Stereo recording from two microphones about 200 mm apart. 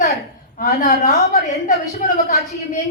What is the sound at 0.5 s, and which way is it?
A woman's voice, 45° left (ahead or behind).